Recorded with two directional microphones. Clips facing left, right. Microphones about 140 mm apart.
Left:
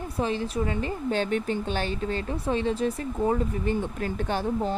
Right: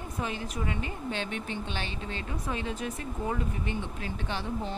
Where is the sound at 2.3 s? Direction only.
30° left (ahead or behind).